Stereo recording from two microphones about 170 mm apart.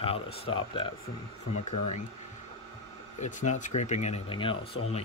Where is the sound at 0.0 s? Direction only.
35° left (ahead or behind).